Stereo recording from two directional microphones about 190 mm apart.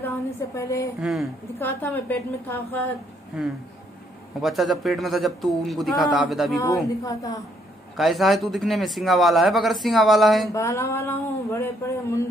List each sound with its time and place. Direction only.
0.0 s a sound: 15° left (ahead or behind)
1.0 s speech: centre (ahead or behind)
1.6 s speech: 10° left (ahead or behind)
3.4 s speech: 5° right (ahead or behind)
6.6 s speech: 15° left (ahead or behind)
8.0 s speech: centre (ahead or behind)
10.5 s speech: 15° left (ahead or behind)